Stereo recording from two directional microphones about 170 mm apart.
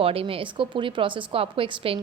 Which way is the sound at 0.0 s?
35° right (ahead or behind).